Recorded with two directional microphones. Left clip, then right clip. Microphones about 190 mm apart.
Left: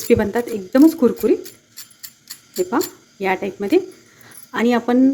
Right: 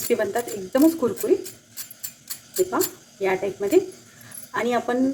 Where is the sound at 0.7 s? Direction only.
50° left (ahead or behind).